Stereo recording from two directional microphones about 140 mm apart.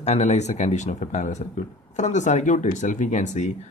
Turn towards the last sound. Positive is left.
turn(degrees=60)  # may be behind; listen again after turning